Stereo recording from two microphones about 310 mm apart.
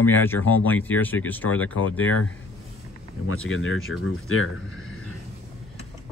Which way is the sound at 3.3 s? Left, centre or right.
Left.